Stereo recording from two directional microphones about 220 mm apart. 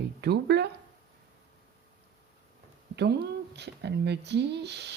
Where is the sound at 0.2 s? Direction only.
50° right (ahead or behind).